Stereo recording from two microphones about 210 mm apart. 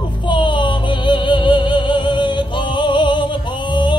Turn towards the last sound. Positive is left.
turn(degrees=20)  # may be behind; listen again after turning